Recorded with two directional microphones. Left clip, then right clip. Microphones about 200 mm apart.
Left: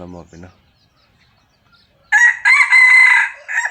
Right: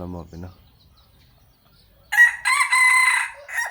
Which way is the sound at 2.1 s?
45° right (ahead or behind).